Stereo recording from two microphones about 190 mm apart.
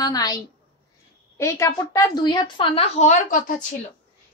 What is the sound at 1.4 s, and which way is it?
A woman's voice, 15° left (ahead or behind).